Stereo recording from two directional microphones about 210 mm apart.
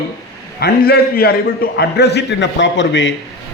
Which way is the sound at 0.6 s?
50° left (ahead or behind).